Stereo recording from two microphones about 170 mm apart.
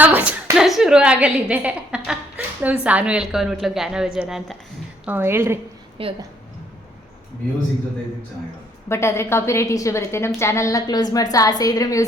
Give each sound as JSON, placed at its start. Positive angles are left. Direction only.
{"t": 0.2, "sound": "a woman's voice", "side_deg": -5}
{"t": 6.0, "sound": "a woman's voice", "side_deg": -30}
{"t": 8.9, "sound": "a woman's voice", "side_deg": 15}